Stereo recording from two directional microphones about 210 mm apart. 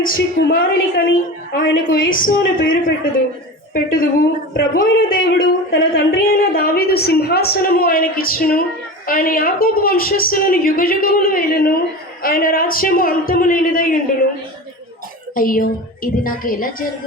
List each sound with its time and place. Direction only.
0.0 s a woman's voice: 45° left (ahead or behind)
15.4 s speech: 45° left (ahead or behind)